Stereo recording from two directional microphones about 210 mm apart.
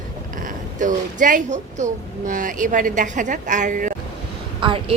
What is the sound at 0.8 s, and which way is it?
Speech, 40° right (ahead or behind).